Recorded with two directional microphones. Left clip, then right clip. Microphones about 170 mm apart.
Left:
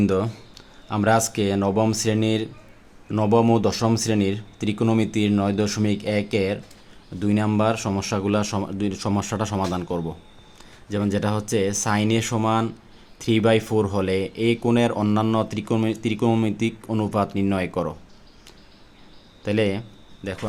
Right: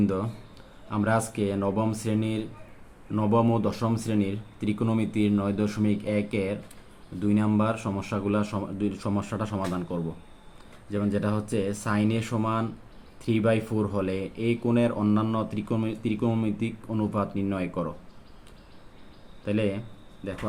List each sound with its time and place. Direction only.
0.0 s speech: 55° left (ahead or behind)
19.5 s speech: 55° left (ahead or behind)